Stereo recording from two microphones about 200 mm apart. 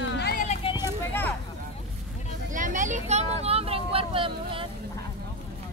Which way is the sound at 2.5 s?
40° right (ahead or behind).